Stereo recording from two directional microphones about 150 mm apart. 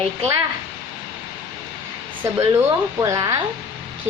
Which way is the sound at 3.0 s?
20° right (ahead or behind).